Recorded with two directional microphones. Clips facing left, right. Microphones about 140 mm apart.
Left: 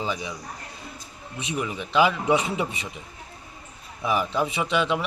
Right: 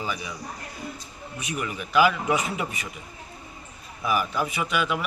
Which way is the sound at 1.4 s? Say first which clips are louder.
Left 2 dB; 25° left (ahead or behind).